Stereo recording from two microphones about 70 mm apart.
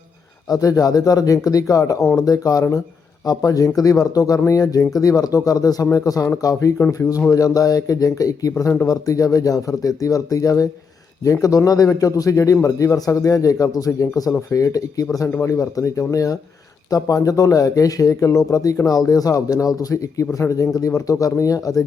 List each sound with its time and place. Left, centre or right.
0.4 s speech: left